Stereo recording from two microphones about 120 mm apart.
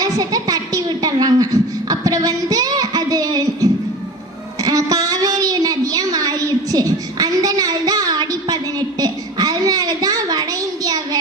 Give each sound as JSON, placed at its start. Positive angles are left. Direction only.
{"t": 0.0, "sound": "speech", "side_deg": -30}
{"t": 1.9, "sound": "child singing", "side_deg": -30}
{"t": 4.6, "sound": "a sound", "side_deg": -30}